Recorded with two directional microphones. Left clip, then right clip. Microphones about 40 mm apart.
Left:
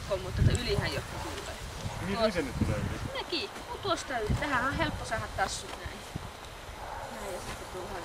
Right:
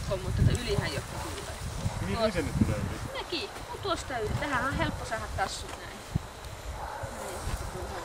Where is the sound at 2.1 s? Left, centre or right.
Centre.